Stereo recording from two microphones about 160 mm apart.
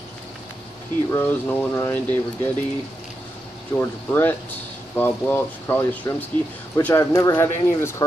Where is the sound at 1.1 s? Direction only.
15° left (ahead or behind).